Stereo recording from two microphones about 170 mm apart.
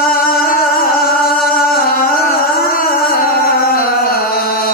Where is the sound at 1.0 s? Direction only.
60° left (ahead or behind).